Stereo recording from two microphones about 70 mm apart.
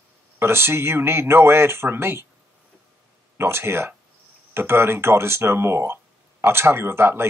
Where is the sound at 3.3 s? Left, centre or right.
Right.